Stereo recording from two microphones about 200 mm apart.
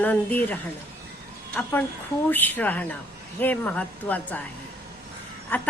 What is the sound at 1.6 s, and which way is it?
A woman's voice, 10° left (ahead or behind).